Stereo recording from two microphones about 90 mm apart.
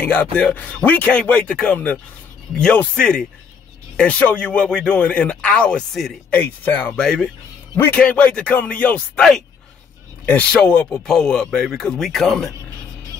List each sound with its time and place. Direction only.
0.0 s speech: 20° left (ahead or behind)
6.9 s speech: 10° left (ahead or behind)
10.3 s speech: 15° left (ahead or behind)